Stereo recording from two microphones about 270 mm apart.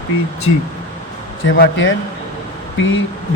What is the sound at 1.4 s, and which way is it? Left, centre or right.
Speech, left.